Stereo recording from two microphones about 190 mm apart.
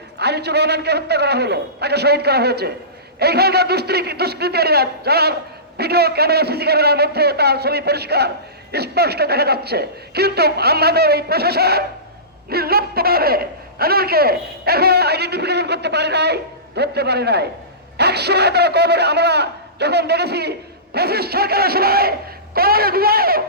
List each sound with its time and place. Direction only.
0.2 s a man's voice: 60° right (ahead or behind)